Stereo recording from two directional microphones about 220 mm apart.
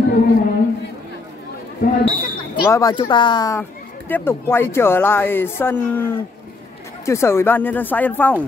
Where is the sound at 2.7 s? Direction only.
15° left (ahead or behind).